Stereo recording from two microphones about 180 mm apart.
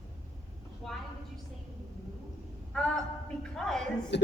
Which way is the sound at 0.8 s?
5° left (ahead or behind).